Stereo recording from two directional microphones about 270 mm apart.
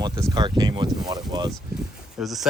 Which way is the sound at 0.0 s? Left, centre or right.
Centre.